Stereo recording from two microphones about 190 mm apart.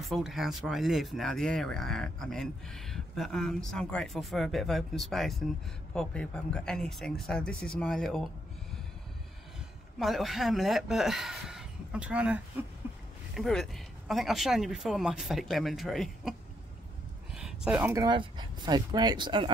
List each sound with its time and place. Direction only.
0.1 s speech: centre (ahead or behind)
9.9 s speech: centre (ahead or behind)
17.3 s a sound: 5° right (ahead or behind)
18.0 s speech: 25° right (ahead or behind)